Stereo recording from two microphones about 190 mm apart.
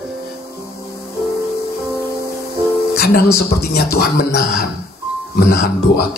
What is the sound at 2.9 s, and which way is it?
Music, 55° left (ahead or behind).